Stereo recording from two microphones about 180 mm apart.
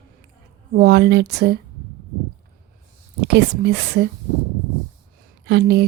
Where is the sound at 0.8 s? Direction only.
65° right (ahead or behind).